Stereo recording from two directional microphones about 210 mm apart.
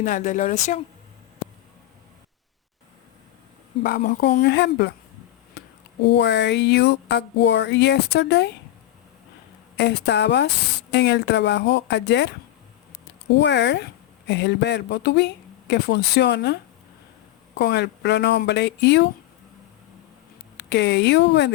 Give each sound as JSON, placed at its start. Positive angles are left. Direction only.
{"t": 0.0, "sound": "speech", "side_deg": 35}
{"t": 3.8, "sound": "speech", "side_deg": 45}
{"t": 4.4, "sound": "speech", "side_deg": 55}
{"t": 5.6, "sound": "a sound", "side_deg": 50}
{"t": 9.7, "sound": "a sound", "side_deg": 55}
{"t": 13.3, "sound": "a sound", "side_deg": 55}
{"t": 14.3, "sound": "speech", "side_deg": 55}
{"t": 17.6, "sound": "speech", "side_deg": 50}
{"t": 20.6, "sound": "speech", "side_deg": 55}